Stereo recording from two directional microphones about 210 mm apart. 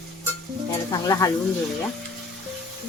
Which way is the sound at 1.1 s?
15° left (ahead or behind).